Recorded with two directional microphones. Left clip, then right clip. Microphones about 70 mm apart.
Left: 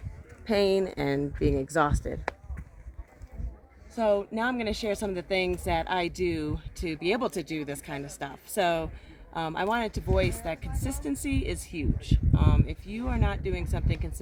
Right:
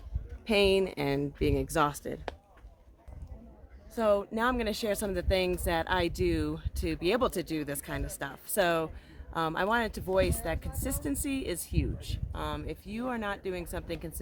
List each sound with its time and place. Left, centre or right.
0.4 s speech: left
3.9 s speech: right